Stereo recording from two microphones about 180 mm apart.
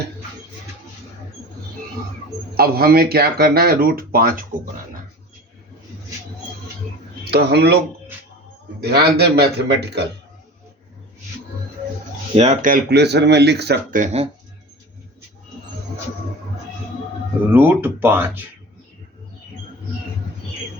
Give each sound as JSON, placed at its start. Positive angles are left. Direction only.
{"t": 2.6, "sound": "speech", "side_deg": -55}
{"t": 7.3, "sound": "speech", "side_deg": -65}
{"t": 8.8, "sound": "speech", "side_deg": -65}
{"t": 12.4, "sound": "speech", "side_deg": -40}
{"t": 12.7, "sound": "speech", "side_deg": -65}
{"t": 13.9, "sound": "speech", "side_deg": -40}
{"t": 17.5, "sound": "speech", "side_deg": -10}